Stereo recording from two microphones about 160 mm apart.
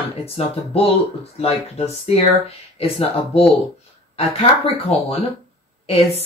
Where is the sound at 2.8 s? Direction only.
35° left (ahead or behind).